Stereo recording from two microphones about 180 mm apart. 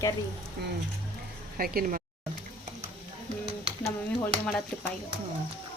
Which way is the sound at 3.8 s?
10° left (ahead or behind).